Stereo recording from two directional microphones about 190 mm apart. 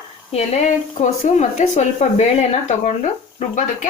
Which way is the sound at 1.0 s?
40° left (ahead or behind).